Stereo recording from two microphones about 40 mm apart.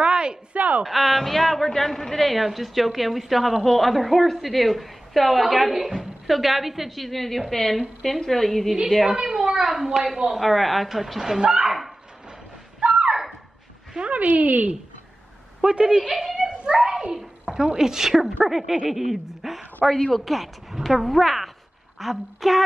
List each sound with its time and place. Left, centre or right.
0.0 s a sound: right
0.6 s a sound: right
0.8 s a man's voice: centre
9.1 s speech: centre
10.3 s speech: centre
12.9 s a sound: centre
14.1 s speech: right
15.6 s a woman's voice: right
16.1 s a woman's voice: centre
16.4 s children playing: centre
17.1 s a sound: centre
17.7 s a woman's voice: centre